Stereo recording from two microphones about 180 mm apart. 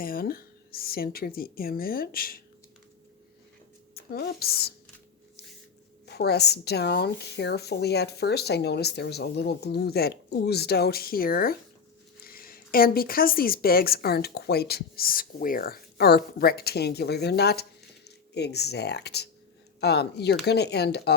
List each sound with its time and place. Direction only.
0.0 s a woman's voice: 55° left (ahead or behind)
3.9 s speech: 60° left (ahead or behind)
6.1 s a woman's voice: 65° left (ahead or behind)